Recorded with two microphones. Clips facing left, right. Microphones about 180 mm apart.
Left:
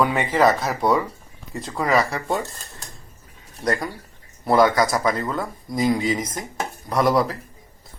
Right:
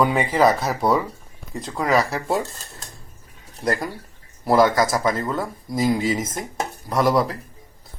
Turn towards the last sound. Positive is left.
turn(degrees=0)  # may be behind; listen again after turning